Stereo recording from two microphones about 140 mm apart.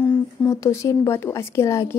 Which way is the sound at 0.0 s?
15° left (ahead or behind).